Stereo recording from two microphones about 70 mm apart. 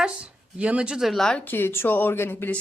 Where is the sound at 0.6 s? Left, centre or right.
Centre.